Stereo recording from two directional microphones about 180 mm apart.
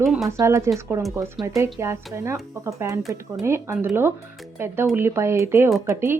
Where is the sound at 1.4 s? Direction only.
Centre (ahead or behind).